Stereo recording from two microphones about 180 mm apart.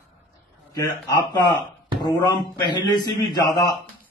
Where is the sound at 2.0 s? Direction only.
25° left (ahead or behind).